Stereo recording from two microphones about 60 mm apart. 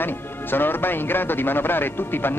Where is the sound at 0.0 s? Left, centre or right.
Left.